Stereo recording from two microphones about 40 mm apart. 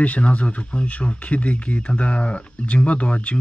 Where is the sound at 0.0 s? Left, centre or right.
Left.